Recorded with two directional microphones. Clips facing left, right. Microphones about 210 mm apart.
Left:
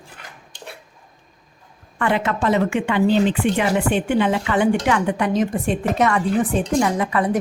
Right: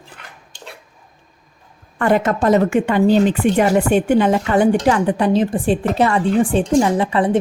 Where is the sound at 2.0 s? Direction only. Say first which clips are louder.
Right 5 dB; 40° right (ahead or behind).